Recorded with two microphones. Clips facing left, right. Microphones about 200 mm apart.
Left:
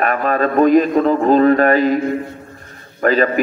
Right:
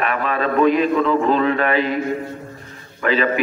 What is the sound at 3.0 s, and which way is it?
Speech, 45° left (ahead or behind).